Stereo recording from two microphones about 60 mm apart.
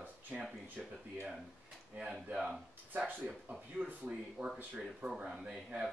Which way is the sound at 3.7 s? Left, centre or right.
Right.